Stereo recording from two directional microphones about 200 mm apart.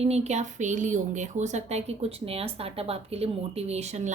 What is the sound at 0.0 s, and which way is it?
A woman's voice, 35° right (ahead or behind).